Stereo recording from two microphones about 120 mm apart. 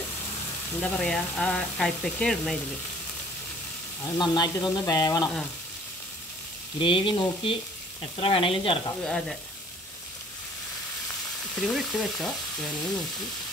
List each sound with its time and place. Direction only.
0.7 s speech: 10° left (ahead or behind)
4.0 s speech: 35° left (ahead or behind)
6.8 s frying: 45° left (ahead or behind)
9.0 s speech: 5° left (ahead or behind)
11.5 s speech: 5° left (ahead or behind)